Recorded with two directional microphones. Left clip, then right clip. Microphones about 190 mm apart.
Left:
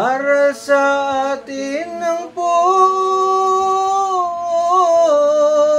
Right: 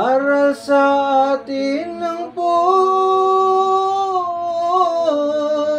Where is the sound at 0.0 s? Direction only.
40° left (ahead or behind).